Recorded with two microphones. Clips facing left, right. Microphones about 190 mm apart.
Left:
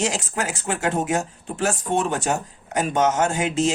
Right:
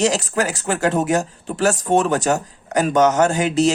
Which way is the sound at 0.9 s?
75° right (ahead or behind).